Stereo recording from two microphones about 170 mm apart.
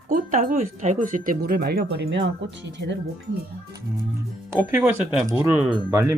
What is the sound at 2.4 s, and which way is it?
Speech, 90° right.